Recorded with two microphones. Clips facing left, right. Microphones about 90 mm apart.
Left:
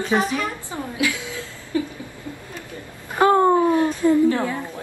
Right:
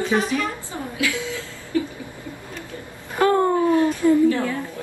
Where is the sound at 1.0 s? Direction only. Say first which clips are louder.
Even; 20° left (ahead or behind).